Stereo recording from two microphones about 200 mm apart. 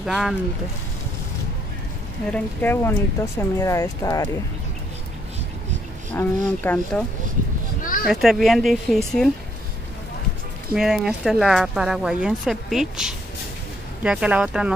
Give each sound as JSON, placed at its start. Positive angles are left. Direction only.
{"t": 0.0, "sound": "speech", "side_deg": 0}
{"t": 2.3, "sound": "speech", "side_deg": 10}
{"t": 6.1, "sound": "speech", "side_deg": 10}
{"t": 7.8, "sound": "a sound", "side_deg": 45}
{"t": 8.1, "sound": "speech", "side_deg": 0}
{"t": 10.7, "sound": "speech", "side_deg": 0}